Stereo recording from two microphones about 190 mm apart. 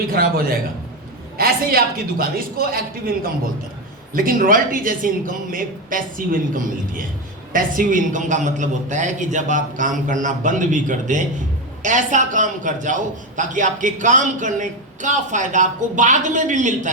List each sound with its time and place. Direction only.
0.0 s a man's voice: 50° right (ahead or behind)